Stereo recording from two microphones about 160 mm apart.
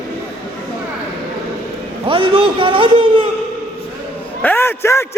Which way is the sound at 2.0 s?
30° right (ahead or behind).